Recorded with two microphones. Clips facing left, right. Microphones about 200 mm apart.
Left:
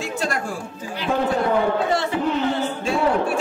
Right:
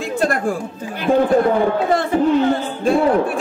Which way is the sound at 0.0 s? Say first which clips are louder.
Right 7 dB; 55° right (ahead or behind).